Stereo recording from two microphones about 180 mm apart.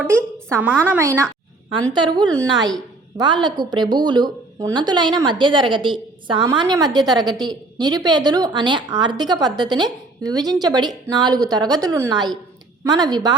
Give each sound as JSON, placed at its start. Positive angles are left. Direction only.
{"t": 0.5, "sound": "a woman's voice", "side_deg": -10}